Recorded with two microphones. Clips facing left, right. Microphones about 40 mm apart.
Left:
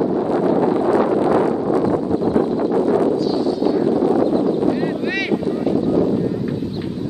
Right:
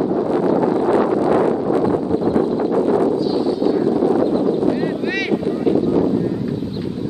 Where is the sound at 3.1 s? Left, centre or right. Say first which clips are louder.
Even; centre.